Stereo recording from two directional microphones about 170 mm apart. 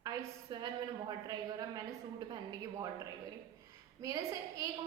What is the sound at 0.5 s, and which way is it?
A woman's voice, 25° right (ahead or behind).